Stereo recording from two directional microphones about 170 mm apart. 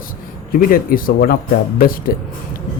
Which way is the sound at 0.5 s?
55° left (ahead or behind).